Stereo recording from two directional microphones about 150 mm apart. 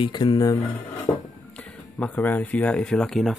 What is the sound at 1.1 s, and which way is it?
Music, 15° left (ahead or behind).